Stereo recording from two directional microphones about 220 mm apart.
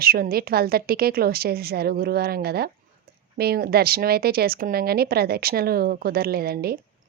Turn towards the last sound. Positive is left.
turn(degrees=-45)  # may be behind; listen again after turning